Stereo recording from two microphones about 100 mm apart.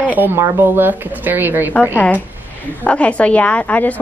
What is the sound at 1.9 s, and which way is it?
A woman's voice, 15° left (ahead or behind).